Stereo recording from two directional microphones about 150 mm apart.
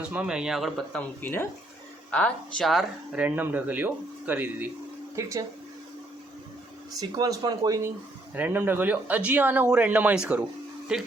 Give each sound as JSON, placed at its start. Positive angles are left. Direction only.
{"t": 0.1, "sound": "speech", "side_deg": -5}
{"t": 6.9, "sound": "speech", "side_deg": -25}